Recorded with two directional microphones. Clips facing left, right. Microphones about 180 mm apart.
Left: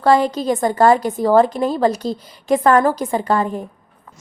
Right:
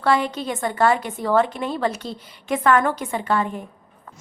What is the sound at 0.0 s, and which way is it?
A woman's voice, 40° left (ahead or behind).